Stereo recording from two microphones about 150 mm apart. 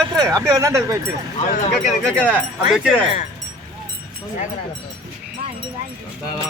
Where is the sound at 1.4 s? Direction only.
60° left (ahead or behind).